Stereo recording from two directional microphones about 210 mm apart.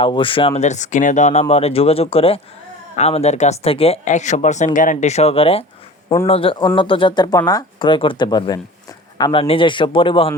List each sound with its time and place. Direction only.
0.0 s speech: 25° left (ahead or behind)